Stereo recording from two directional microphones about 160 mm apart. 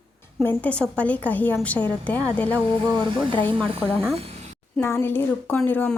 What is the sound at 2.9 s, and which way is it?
Speech, 30° right (ahead or behind).